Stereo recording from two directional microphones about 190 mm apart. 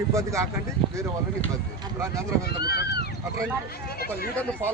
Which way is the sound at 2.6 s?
55° left (ahead or behind).